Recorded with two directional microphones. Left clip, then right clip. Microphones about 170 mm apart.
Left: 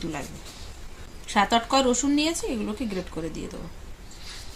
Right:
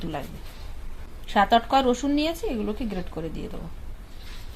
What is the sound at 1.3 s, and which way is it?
Speech, 45° right (ahead or behind).